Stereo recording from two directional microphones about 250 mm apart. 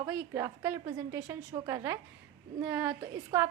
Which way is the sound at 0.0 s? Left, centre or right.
Centre.